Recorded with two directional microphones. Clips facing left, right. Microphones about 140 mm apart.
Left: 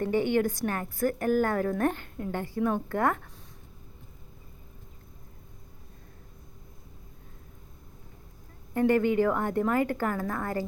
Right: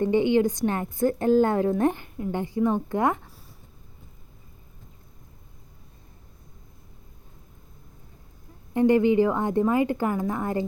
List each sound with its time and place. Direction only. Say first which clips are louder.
0.0 s a woman's voice: right 5 dB; 20° right (ahead or behind)
8.7 s a woman's voice: right 4 dB; 15° right (ahead or behind)